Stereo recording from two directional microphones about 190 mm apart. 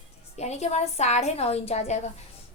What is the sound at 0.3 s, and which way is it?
A woman's voice, 35° left (ahead or behind).